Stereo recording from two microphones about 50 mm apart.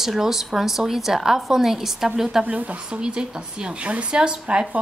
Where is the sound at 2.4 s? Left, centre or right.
Right.